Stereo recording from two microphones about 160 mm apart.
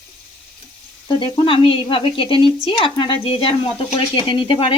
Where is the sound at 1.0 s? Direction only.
30° left (ahead or behind).